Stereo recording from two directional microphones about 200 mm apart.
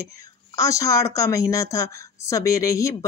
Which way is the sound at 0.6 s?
15° left (ahead or behind).